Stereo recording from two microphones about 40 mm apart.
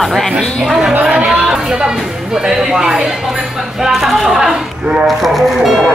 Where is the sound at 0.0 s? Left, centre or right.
Centre.